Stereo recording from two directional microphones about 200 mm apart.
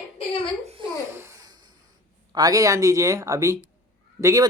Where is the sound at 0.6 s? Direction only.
30° right (ahead or behind).